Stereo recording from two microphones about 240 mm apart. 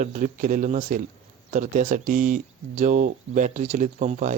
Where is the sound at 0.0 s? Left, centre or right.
Right.